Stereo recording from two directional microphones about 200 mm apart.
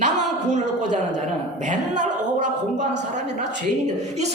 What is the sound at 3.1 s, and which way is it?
A woman's voice, 35° right (ahead or behind).